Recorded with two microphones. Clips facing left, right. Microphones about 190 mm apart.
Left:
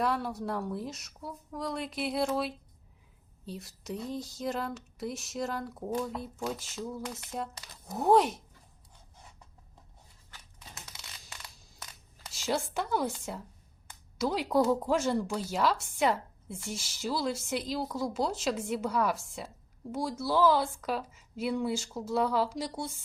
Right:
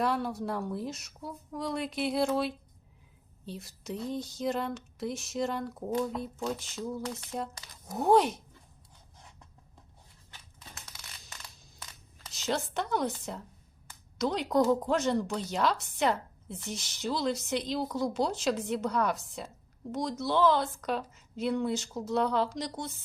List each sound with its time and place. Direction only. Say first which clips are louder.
0.0 s speech: right 1 dB; centre (ahead or behind)
10.9 s a sound: left 1 dB; 25° left (ahead or behind)
12.3 s a woman's voice: even; 5° left (ahead or behind)